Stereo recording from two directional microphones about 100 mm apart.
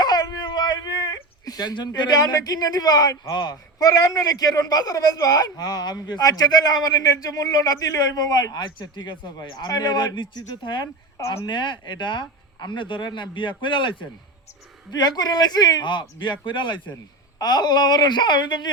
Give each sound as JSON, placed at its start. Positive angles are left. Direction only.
{"t": 0.0, "sound": "a sound", "side_deg": 45}
{"t": 2.0, "sound": "a man's voice", "side_deg": 40}
{"t": 14.9, "sound": "speech", "side_deg": 40}
{"t": 17.3, "sound": "speech", "side_deg": 45}